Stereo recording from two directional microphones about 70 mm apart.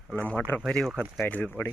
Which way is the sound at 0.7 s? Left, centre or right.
Centre.